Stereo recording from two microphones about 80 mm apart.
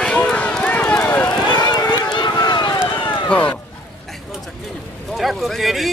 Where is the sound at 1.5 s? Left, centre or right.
Left.